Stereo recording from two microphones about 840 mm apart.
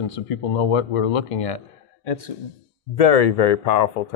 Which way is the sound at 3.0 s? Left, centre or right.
Left.